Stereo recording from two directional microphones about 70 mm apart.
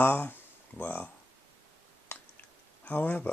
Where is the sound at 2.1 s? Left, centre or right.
Left.